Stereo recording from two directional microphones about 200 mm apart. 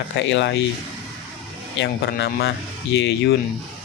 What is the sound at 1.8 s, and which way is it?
Speech, 60° left (ahead or behind).